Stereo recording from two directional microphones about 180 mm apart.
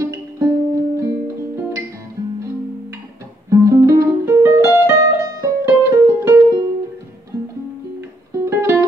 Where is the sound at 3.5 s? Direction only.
15° right (ahead or behind).